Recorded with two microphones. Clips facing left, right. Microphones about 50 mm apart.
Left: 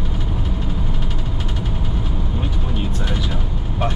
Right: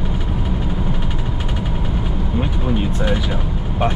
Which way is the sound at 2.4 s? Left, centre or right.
Centre.